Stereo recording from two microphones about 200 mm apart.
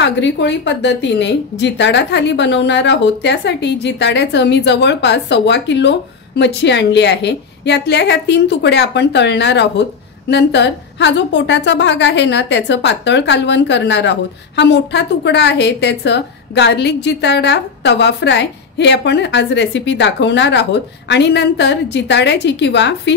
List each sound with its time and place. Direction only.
0.0 s a woman's voice: 60° left (ahead or behind)